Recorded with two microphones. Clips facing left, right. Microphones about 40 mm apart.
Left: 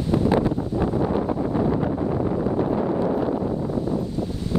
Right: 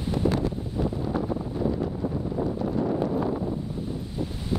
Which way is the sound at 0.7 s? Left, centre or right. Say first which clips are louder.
Left 6 dB; left.